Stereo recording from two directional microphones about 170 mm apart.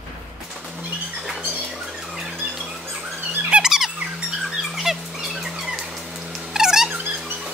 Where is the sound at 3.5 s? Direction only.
5° right (ahead or behind).